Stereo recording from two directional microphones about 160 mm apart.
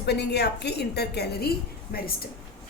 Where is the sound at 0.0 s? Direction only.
90° left; by 2.1 s 75° left (ahead or behind).